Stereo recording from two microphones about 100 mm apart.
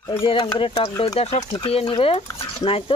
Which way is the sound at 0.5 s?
65° left (ahead or behind).